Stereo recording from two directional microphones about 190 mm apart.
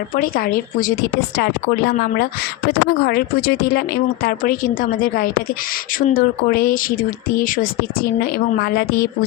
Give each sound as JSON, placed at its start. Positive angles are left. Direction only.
{"t": 0.2, "sound": "speech", "side_deg": 50}